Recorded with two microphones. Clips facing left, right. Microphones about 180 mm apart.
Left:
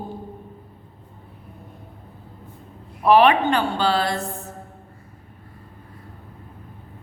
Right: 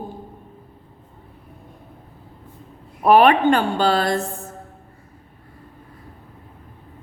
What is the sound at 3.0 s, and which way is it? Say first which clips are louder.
A woman's voice: right 2 dB; 45° right (ahead or behind).